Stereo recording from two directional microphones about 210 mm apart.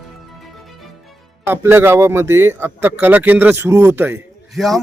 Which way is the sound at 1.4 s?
10° right (ahead or behind).